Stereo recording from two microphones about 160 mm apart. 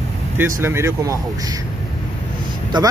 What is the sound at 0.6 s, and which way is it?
Speech, 15° right (ahead or behind).